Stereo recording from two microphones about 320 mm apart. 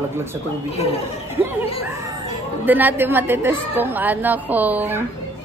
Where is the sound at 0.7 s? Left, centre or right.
Centre.